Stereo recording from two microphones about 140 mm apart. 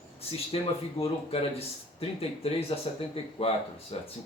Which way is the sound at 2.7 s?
40° left (ahead or behind).